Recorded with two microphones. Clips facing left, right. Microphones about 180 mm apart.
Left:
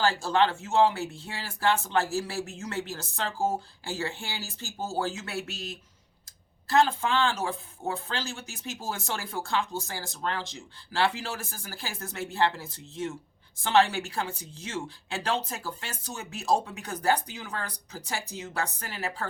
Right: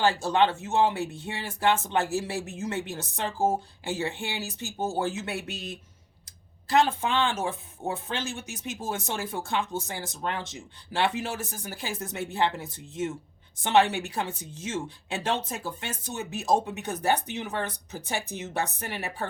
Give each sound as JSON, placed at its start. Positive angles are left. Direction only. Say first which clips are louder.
{"t": 0.0, "sound": "speech", "louder": "right 1 dB", "side_deg": -20}
{"t": 6.7, "sound": "speech", "louder": "even", "side_deg": -20}